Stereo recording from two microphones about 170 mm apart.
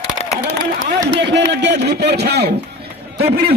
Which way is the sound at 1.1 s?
90° right.